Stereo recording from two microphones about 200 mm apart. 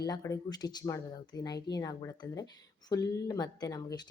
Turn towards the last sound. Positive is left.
turn(degrees=20)  # may be behind; listen again after turning